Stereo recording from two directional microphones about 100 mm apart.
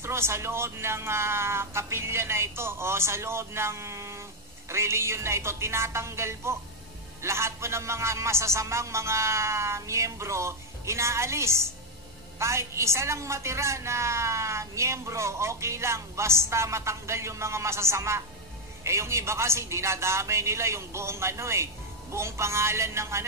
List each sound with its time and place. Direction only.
0.0 s a woman's voice: 25° right (ahead or behind)